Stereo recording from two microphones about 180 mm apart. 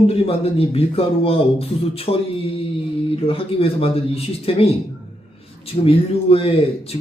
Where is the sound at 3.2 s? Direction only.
30° left (ahead or behind).